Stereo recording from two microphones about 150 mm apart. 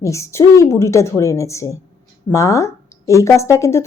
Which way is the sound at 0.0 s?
20° left (ahead or behind).